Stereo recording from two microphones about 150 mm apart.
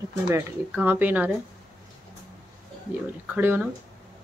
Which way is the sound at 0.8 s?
10° right (ahead or behind).